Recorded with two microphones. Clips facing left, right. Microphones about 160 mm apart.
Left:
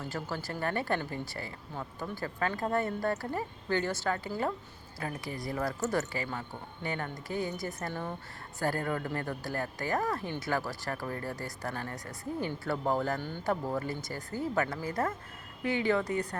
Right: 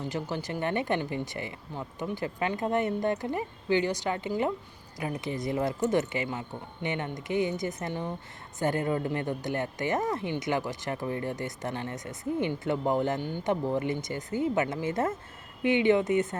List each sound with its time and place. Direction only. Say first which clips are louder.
0.0 s speech: right 4 dB; 20° right (ahead or behind)